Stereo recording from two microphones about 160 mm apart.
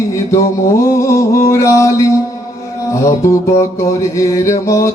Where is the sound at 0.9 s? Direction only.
20° left (ahead or behind).